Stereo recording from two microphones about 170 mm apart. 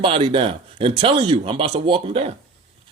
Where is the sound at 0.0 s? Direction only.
35° right (ahead or behind).